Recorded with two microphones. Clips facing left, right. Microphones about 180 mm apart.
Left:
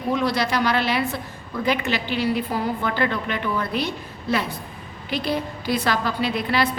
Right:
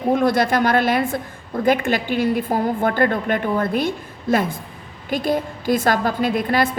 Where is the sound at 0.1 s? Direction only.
50° right (ahead or behind).